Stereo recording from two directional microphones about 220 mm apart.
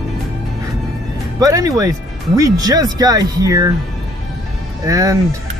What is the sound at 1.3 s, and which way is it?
Speech, 15° right (ahead or behind).